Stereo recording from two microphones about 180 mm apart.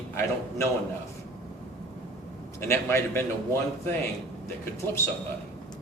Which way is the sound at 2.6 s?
15° left (ahead or behind).